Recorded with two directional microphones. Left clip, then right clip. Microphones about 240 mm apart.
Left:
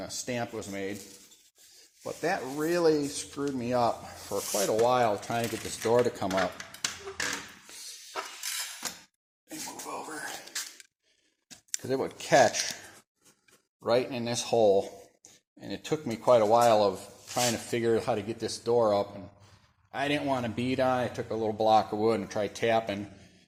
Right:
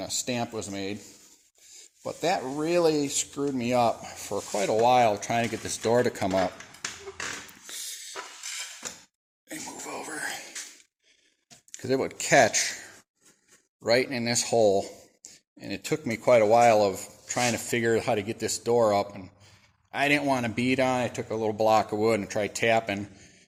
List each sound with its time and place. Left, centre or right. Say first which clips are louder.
0.3 s speech: right 3 dB; right
2.0 s speech: right 3 dB; right
7.7 s a sound: right 6 dB; right
9.5 s a sound: right 1 dB; right
11.8 s speech: right 4 dB; right
14.1 s speech: right 3 dB; right